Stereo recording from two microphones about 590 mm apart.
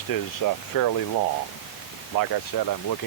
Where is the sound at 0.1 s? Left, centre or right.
Left.